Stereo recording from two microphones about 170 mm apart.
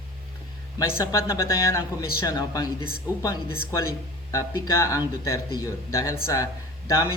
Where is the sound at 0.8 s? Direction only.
20° left (ahead or behind).